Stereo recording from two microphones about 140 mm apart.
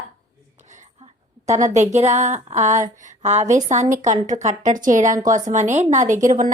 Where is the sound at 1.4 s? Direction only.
55° right (ahead or behind).